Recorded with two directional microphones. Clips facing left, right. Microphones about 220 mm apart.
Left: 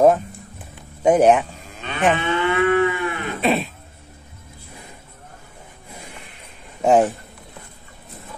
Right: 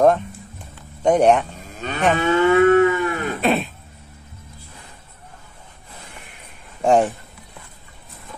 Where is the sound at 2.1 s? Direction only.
40° right (ahead or behind).